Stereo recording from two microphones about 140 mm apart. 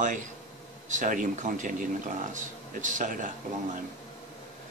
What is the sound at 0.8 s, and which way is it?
Speech, 70° right (ahead or behind).